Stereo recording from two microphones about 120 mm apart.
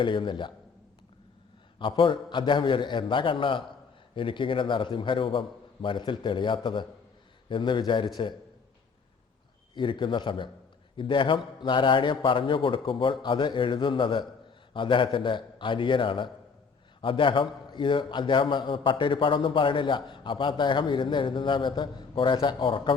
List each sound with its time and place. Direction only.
0.0 s a man's voice: 45° left (ahead or behind)
1.8 s a man's voice: 45° left (ahead or behind)
9.7 s a man's voice: 40° left (ahead or behind)